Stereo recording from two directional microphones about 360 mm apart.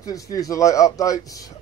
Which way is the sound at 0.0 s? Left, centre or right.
Centre.